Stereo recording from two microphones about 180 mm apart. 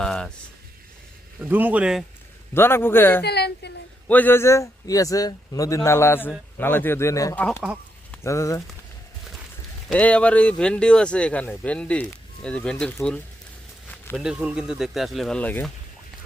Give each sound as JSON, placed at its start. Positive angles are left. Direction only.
{"t": 0.0, "sound": "speech", "side_deg": 5}
{"t": 1.5, "sound": "speech", "side_deg": -10}
{"t": 2.6, "sound": "speech", "side_deg": 15}
{"t": 3.2, "sound": "a woman's voice", "side_deg": 65}
{"t": 4.1, "sound": "speech", "side_deg": 10}
{"t": 9.9, "sound": "speech", "side_deg": 5}
{"t": 14.2, "sound": "speech", "side_deg": -5}